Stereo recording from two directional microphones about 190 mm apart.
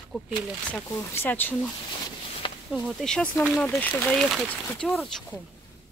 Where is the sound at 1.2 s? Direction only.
10° left (ahead or behind).